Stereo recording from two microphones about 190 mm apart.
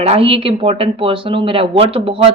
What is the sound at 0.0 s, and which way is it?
Speech, 30° right (ahead or behind).